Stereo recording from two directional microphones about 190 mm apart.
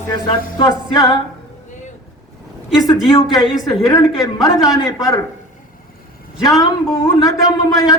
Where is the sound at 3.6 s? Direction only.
20° left (ahead or behind).